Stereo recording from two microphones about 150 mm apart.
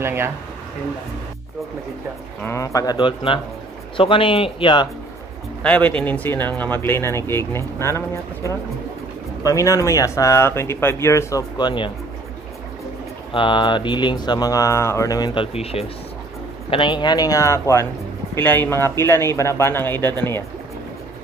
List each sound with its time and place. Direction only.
0.0 s speech: 15° right (ahead or behind)
2.4 s speech: 20° left (ahead or behind); by 4.8 s 35° left (ahead or behind)
5.6 s speech: 10° left (ahead or behind); by 11.9 s 30° left (ahead or behind)
13.3 s speech: 35° left (ahead or behind)
16.7 s speech: 30° left (ahead or behind); by 20.4 s 15° left (ahead or behind)